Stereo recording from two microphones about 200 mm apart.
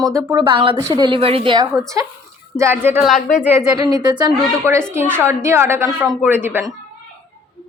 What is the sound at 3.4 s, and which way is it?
Speech, 15° right (ahead or behind).